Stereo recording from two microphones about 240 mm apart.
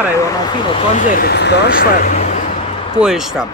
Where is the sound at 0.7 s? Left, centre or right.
Left.